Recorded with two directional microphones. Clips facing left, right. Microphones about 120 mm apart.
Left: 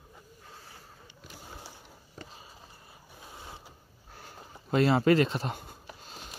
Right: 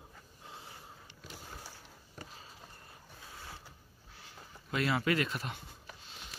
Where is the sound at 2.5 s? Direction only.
10° left (ahead or behind).